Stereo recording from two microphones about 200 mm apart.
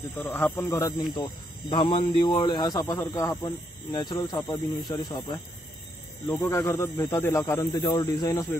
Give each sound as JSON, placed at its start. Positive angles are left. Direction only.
{"t": 0.1, "sound": "speech", "side_deg": 10}
{"t": 6.2, "sound": "speech", "side_deg": 10}